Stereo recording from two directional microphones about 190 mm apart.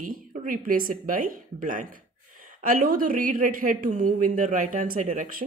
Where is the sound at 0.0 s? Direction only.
45° right (ahead or behind).